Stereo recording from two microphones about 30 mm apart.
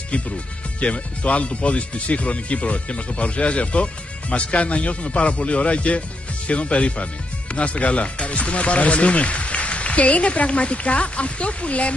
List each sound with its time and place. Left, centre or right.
0.7 s speech: left